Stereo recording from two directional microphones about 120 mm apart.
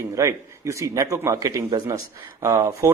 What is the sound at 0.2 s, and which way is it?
Speech, 25° right (ahead or behind).